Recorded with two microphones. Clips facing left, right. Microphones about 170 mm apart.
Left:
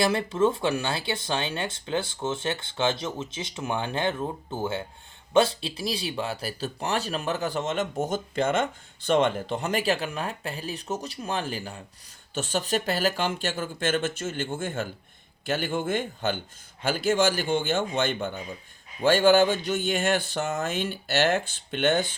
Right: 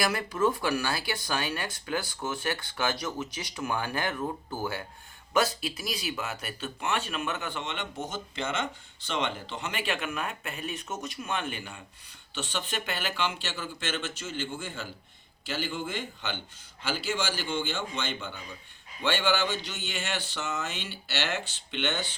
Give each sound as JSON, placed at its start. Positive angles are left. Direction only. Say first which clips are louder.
{"t": 0.0, "sound": "speech", "louder": "left 4 dB", "side_deg": 25}